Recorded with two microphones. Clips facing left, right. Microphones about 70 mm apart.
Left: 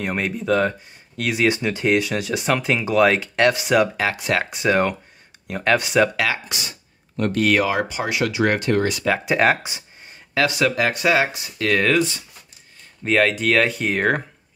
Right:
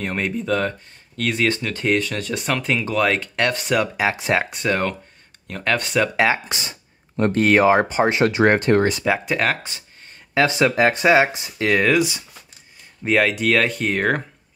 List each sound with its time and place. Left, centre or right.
0.0 s speech: centre
3.9 s speech: centre
4.5 s speech: centre
6.1 s speech: right
9.2 s speech: centre
10.3 s speech: right
11.8 s speech: centre